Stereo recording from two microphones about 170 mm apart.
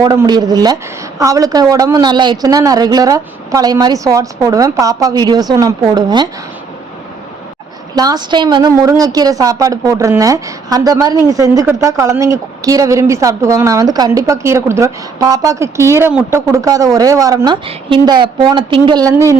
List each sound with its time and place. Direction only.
0.0 s a woman's voice: 20° right (ahead or behind)
7.9 s a woman's voice: 25° right (ahead or behind)